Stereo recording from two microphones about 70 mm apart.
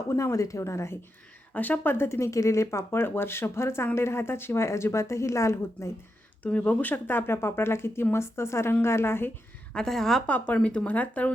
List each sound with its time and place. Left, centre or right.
0.1 s speech: left
1.5 s speech: left
2.0 s speech: left
6.4 s speech: left
9.7 s a woman's voice: centre
10.2 s speech: left